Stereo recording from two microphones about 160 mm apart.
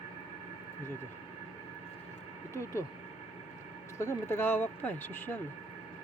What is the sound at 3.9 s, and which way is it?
Speech, 20° left (ahead or behind).